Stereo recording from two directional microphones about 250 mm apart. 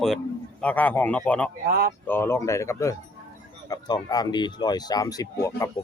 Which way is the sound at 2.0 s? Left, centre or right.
Centre.